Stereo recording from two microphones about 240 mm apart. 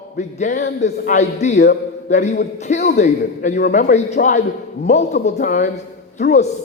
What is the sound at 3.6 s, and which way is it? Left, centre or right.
A man's voice, left.